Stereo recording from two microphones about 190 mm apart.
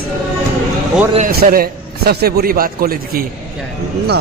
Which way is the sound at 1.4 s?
55° right (ahead or behind).